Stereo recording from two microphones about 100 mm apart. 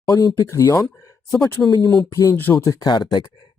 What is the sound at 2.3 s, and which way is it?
Speech, 20° left (ahead or behind).